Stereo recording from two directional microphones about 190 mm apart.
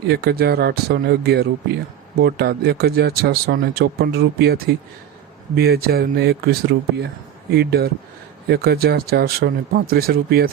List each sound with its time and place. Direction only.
0.1 s speech: 55° right (ahead or behind)